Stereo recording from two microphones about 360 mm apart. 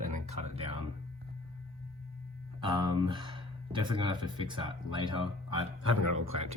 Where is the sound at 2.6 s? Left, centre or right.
Centre.